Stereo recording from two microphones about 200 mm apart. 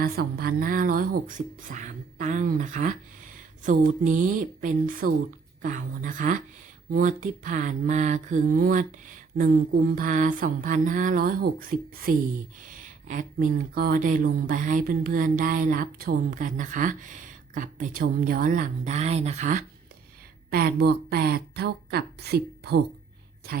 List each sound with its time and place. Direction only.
0.0 s speech: 50° right (ahead or behind)
20.5 s a woman's voice: 50° right (ahead or behind)